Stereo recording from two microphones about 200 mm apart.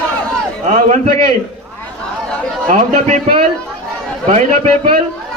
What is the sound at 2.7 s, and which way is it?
A man's voice, 35° right (ahead or behind).